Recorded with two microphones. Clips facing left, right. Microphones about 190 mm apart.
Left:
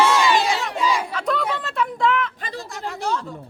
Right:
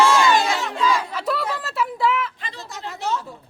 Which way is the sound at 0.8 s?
15° left (ahead or behind).